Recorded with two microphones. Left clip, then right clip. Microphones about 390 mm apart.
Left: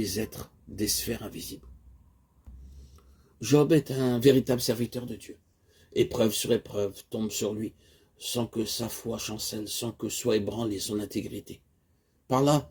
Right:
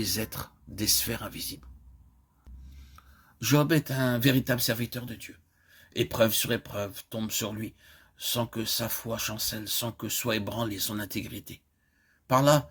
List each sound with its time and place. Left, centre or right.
0.0 s speech: right
3.3 s speech: right